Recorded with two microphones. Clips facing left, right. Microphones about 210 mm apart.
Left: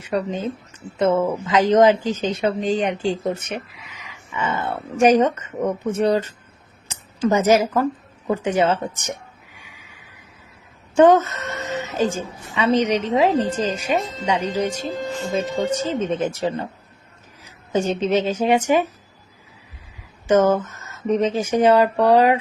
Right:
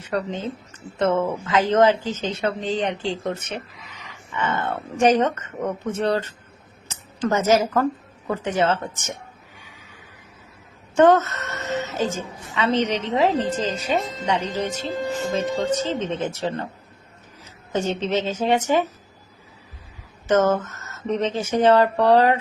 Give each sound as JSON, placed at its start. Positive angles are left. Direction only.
{"t": 0.0, "sound": "a woman's voice", "side_deg": 10}
{"t": 9.6, "sound": "neigh", "side_deg": 10}
{"t": 10.9, "sound": "a woman's voice", "side_deg": 15}
{"t": 20.2, "sound": "a woman's voice", "side_deg": 10}